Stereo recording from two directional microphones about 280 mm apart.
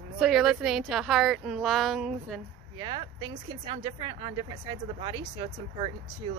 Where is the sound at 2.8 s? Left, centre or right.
Centre.